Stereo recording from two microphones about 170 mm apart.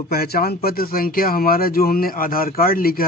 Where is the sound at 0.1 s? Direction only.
65° left (ahead or behind).